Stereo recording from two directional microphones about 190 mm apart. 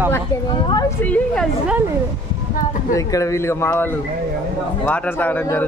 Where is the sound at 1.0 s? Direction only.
5° left (ahead or behind).